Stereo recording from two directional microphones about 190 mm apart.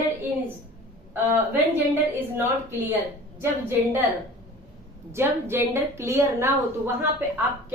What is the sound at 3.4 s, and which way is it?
Speech, 10° right (ahead or behind).